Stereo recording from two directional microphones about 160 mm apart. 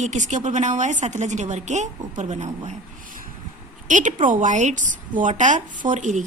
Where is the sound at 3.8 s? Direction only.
50° right (ahead or behind).